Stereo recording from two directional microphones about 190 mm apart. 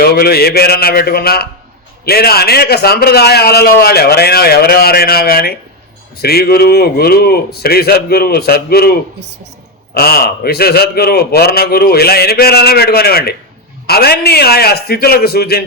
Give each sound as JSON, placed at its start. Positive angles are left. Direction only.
{"t": 0.0, "sound": "a man's voice", "side_deg": 55}